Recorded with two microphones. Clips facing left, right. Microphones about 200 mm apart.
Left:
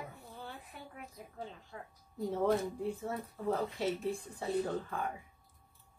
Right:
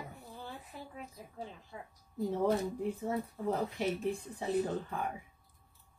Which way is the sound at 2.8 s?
15° right (ahead or behind).